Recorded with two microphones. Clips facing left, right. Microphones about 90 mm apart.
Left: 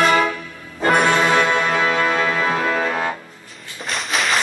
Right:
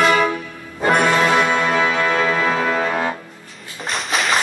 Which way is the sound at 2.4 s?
Centre (ahead or behind).